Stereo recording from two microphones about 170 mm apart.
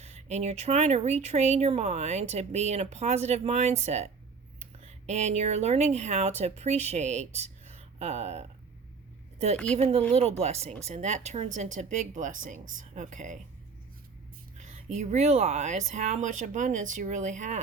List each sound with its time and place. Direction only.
0.0 s speech: 40° right (ahead or behind)
9.7 s speech: 35° right (ahead or behind)
14.6 s speech: 45° right (ahead or behind)